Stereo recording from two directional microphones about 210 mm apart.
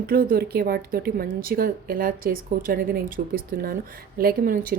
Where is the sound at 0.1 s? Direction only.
45° right (ahead or behind).